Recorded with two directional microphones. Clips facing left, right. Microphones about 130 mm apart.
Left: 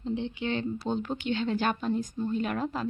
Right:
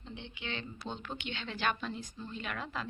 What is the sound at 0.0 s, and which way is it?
Speech, 35° left (ahead or behind).